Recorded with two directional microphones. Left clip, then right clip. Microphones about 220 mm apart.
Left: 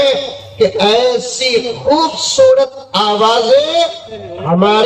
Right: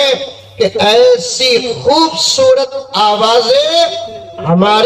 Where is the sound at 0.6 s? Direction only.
50° right (ahead or behind).